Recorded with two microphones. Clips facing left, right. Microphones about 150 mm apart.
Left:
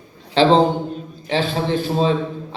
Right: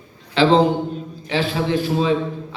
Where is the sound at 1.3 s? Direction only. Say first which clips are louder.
Even; 35° left (ahead or behind).